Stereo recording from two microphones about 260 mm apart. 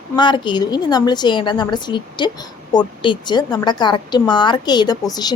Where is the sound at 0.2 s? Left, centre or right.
Centre.